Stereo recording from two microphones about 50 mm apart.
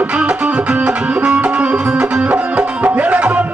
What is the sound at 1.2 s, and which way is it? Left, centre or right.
Music, right.